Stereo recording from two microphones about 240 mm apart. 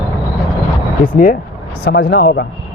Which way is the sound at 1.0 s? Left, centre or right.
Left.